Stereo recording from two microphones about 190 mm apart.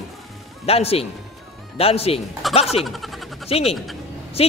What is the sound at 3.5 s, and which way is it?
Speech, 30° left (ahead or behind).